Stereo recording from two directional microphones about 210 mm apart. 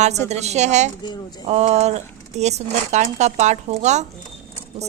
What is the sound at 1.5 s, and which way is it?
Speech, 30° right (ahead or behind).